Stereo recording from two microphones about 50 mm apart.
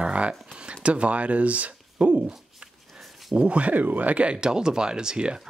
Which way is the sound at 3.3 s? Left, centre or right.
Right.